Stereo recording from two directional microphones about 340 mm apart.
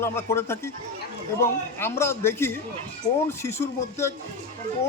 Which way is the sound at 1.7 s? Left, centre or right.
Centre.